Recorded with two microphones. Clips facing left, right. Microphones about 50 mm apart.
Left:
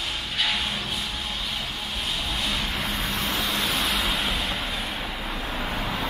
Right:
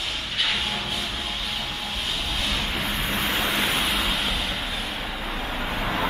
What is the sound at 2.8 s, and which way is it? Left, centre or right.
Vehicle, right.